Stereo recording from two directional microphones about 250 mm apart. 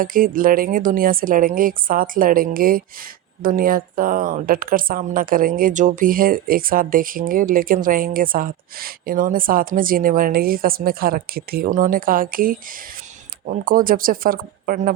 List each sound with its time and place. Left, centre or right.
0.0 s speech: right